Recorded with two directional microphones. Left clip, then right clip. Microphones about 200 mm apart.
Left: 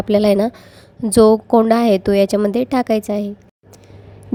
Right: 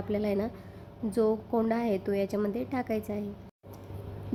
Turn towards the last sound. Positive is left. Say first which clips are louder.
# left 15 dB
turn(degrees=40)  # may be behind; listen again after turning